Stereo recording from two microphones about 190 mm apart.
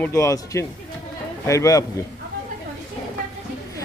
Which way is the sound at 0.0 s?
15° left (ahead or behind).